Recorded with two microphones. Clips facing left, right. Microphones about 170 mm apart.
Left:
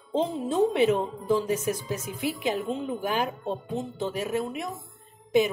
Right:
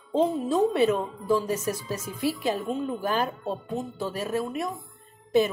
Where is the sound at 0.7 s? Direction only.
20° left (ahead or behind).